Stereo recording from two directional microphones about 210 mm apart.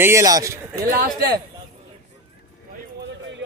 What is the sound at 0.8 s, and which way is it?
Speech, 45° right (ahead or behind).